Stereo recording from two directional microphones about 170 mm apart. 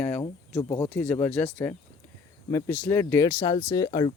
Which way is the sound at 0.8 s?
10° left (ahead or behind).